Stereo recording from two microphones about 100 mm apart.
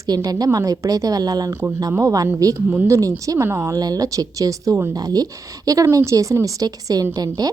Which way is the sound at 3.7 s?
40° right (ahead or behind).